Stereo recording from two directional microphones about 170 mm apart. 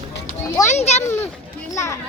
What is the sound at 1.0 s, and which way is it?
Speech, 15° left (ahead or behind).